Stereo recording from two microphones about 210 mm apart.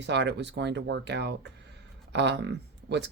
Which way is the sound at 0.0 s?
55° right (ahead or behind).